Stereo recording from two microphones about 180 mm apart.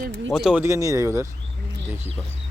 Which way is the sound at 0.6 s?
15° right (ahead or behind).